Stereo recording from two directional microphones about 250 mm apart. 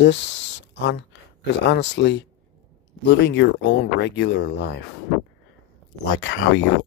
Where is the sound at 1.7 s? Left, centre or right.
Left.